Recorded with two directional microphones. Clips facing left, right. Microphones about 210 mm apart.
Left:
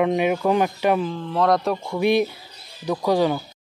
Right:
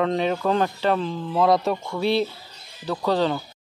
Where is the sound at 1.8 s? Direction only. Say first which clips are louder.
Left 3 dB; 15° left (ahead or behind).